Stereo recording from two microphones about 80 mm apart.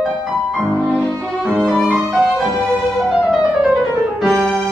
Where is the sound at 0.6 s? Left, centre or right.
Centre.